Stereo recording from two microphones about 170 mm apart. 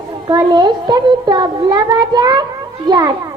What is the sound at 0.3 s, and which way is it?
A child's voice, 25° right (ahead or behind).